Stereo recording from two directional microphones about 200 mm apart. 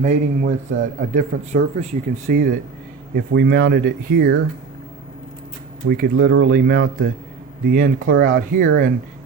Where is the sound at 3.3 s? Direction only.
60° right (ahead or behind).